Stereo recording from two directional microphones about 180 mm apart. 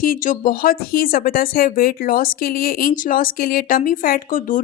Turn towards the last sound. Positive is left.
turn(degrees=50)  # may be behind; listen again after turning